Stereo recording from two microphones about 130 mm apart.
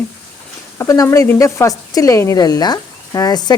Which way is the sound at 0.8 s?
25° left (ahead or behind).